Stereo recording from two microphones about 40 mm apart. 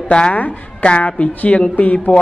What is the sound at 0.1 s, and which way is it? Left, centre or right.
Speech, left.